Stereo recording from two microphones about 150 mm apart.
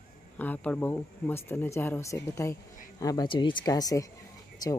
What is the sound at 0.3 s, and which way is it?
Speech, 10° left (ahead or behind).